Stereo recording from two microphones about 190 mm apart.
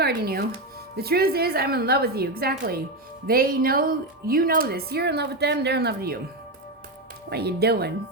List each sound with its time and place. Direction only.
0.0 s a woman's voice: 55° right (ahead or behind)
7.3 s a woman's voice: 60° right (ahead or behind)